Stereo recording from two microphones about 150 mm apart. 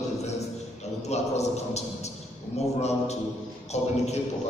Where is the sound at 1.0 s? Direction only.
45° left (ahead or behind).